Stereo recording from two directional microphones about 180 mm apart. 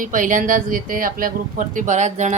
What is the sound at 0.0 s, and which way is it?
Music, 45° right (ahead or behind).